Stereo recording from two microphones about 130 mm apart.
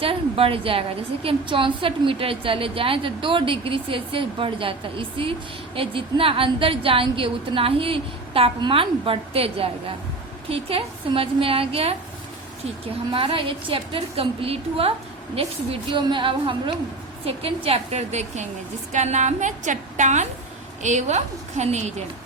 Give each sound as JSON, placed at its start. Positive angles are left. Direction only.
{"t": 0.0, "sound": "a woman's voice", "side_deg": -45}
{"t": 13.1, "sound": "a woman's voice", "side_deg": -45}